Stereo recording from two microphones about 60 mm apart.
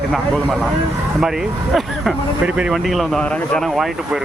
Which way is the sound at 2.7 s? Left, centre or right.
Centre.